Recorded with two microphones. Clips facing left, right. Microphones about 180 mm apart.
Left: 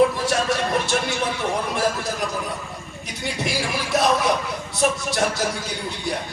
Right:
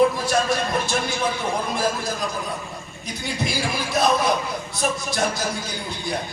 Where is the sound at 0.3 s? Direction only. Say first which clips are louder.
Even; 75° left (ahead or behind).